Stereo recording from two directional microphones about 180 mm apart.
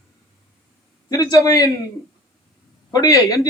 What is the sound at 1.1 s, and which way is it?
Speech, 20° left (ahead or behind).